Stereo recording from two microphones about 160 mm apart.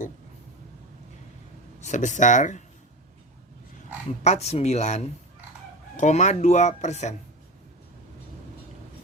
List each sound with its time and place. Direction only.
1.8 s speech: 50° left (ahead or behind)
4.2 s speech: 45° left (ahead or behind)